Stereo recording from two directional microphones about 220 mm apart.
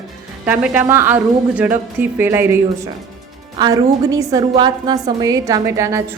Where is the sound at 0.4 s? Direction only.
5° right (ahead or behind).